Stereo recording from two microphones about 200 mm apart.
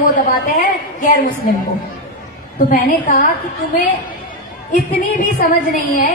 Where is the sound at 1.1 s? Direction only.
45° left (ahead or behind).